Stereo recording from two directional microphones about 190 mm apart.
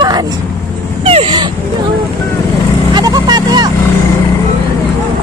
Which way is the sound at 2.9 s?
20° right (ahead or behind).